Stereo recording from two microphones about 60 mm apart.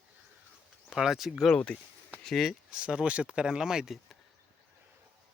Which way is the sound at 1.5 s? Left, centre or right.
Centre.